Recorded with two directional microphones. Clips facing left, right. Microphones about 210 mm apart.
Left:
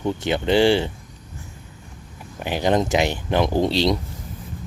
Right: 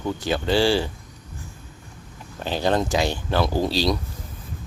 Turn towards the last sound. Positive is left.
turn(degrees=20)  # may be behind; listen again after turning